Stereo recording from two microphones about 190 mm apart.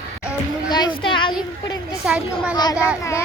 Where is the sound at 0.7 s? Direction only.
20° left (ahead or behind).